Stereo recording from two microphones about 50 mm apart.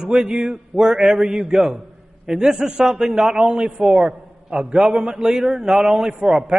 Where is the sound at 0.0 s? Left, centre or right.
Centre.